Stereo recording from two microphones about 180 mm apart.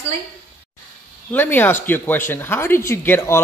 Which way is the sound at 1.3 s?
10° left (ahead or behind).